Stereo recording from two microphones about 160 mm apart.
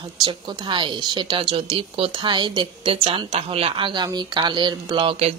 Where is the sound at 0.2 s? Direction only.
30° right (ahead or behind).